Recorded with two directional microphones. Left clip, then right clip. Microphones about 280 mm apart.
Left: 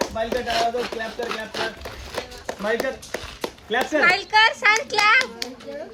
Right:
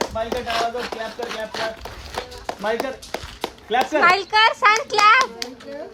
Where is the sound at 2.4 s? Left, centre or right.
Right.